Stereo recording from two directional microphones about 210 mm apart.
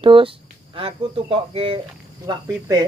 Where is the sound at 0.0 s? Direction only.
25° right (ahead or behind).